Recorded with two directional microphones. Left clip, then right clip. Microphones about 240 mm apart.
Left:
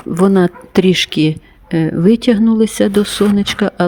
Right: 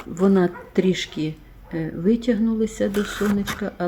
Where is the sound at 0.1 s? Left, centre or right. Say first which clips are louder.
Left 7 dB; left.